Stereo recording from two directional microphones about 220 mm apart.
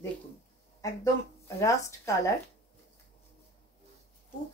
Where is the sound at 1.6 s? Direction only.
15° left (ahead or behind).